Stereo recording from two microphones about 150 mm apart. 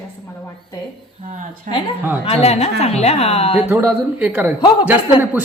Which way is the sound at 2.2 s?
45° left (ahead or behind).